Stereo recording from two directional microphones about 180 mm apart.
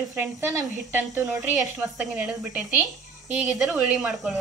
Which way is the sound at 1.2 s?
Centre (ahead or behind).